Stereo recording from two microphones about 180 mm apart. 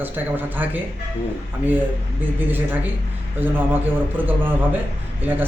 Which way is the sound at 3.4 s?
10° right (ahead or behind).